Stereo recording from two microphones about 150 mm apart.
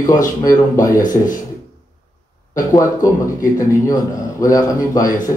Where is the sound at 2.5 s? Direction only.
25° left (ahead or behind).